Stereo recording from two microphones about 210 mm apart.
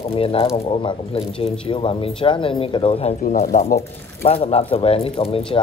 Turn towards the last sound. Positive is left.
turn(degrees=25)  # may be behind; listen again after turning